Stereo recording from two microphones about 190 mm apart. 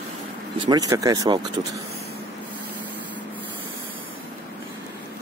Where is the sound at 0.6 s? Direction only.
20° right (ahead or behind).